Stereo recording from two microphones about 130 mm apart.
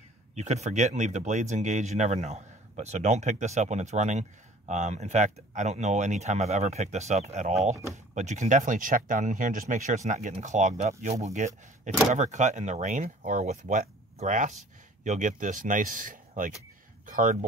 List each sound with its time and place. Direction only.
0.3 s speech: 60° right (ahead or behind); by 17.5 s 90° right